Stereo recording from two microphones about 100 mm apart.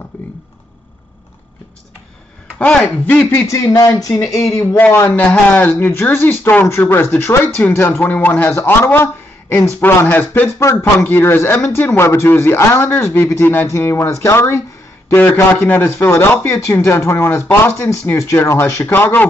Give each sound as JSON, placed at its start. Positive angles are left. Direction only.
{"t": 0.1, "sound": "a sound", "side_deg": 20}
{"t": 2.6, "sound": "speech", "side_deg": 15}
{"t": 3.4, "sound": "speech", "side_deg": 35}
{"t": 4.7, "sound": "speech", "side_deg": 20}